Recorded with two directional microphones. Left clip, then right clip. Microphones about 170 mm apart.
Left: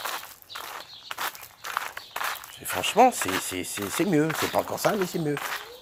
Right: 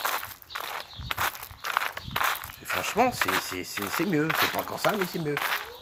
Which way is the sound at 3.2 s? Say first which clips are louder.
Right 2 dB; 35° right (ahead or behind).